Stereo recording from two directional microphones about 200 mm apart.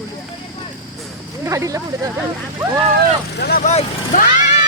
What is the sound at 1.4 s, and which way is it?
Speech, 15° right (ahead or behind).